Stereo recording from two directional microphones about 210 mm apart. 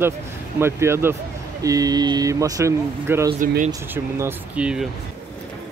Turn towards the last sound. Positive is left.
turn(degrees=-5)  # may be behind; listen again after turning